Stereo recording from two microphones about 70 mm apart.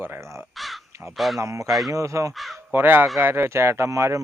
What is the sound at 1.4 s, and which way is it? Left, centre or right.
Speech, right.